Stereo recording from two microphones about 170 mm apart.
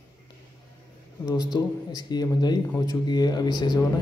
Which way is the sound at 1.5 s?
25° left (ahead or behind).